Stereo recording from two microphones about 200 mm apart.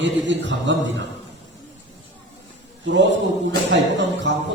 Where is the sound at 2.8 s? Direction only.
65° right (ahead or behind).